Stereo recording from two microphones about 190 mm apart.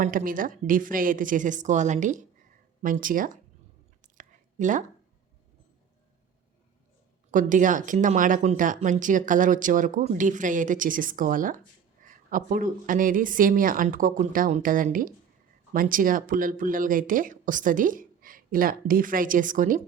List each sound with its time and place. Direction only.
0.0 s speech: 45° right (ahead or behind)
4.0 s a sound: 40° right (ahead or behind)
7.3 s speech: 45° right (ahead or behind)